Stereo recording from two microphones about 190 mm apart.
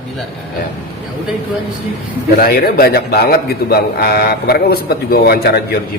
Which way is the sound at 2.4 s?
55° left (ahead or behind).